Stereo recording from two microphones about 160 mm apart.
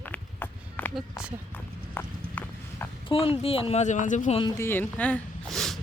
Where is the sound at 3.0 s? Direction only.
35° left (ahead or behind).